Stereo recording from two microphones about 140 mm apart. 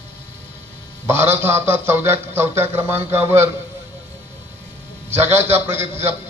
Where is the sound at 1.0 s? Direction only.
15° right (ahead or behind).